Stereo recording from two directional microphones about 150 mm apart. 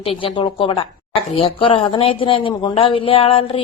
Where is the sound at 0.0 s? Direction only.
35° left (ahead or behind).